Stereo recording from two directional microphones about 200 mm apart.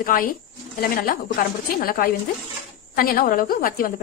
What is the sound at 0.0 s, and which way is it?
A woman's voice, 45° left (ahead or behind).